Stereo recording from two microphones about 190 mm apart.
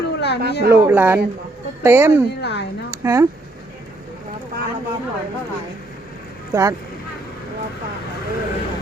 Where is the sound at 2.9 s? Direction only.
15° right (ahead or behind).